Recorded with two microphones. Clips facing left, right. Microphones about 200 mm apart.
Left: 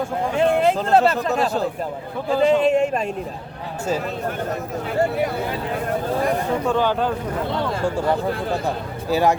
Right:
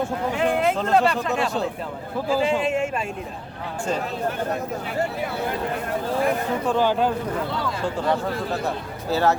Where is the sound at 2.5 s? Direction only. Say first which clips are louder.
Left 6 dB; 40° left (ahead or behind).